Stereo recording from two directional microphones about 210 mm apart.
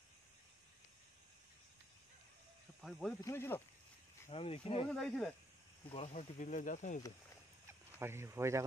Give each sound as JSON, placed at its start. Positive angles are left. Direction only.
{"t": 2.8, "sound": "speech", "side_deg": 0}
{"t": 4.3, "sound": "speech", "side_deg": 25}
{"t": 4.8, "sound": "speech", "side_deg": 5}
{"t": 5.9, "sound": "speech", "side_deg": 30}
{"t": 8.0, "sound": "speech", "side_deg": -10}